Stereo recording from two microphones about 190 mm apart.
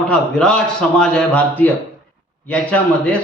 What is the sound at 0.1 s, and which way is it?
A man's voice, 5° left (ahead or behind).